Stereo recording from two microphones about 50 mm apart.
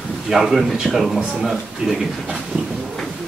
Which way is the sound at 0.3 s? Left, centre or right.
Centre.